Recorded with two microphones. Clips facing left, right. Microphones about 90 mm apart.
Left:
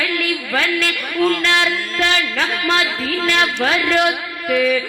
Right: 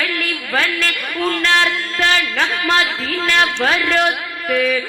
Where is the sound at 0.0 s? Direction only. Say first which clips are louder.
Left 1 dB; 45° right (ahead or behind).